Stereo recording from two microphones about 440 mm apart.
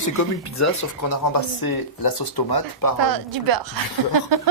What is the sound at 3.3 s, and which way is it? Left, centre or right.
Speech, right.